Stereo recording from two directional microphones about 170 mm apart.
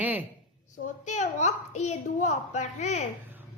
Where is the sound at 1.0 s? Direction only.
40° left (ahead or behind).